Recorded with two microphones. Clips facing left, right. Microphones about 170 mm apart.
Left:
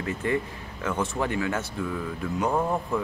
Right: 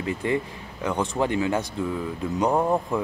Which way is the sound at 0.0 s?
20° right (ahead or behind).